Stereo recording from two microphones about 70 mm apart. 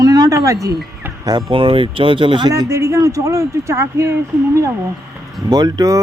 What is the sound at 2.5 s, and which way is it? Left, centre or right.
A man's voice, right.